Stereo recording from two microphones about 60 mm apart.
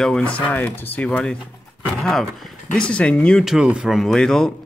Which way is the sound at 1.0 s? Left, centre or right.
Centre.